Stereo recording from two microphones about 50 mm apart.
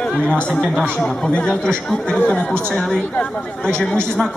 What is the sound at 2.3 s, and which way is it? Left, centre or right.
Speech, left.